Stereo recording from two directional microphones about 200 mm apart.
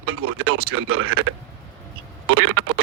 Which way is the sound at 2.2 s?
90° right.